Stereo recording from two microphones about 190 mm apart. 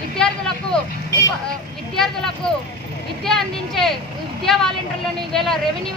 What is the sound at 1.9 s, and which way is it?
A woman's voice, centre (ahead or behind).